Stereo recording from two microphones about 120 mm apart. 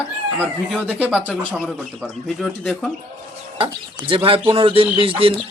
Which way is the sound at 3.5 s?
45° right (ahead or behind).